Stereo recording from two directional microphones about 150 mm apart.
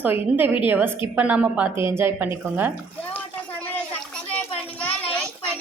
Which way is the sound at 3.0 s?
10° left (ahead or behind).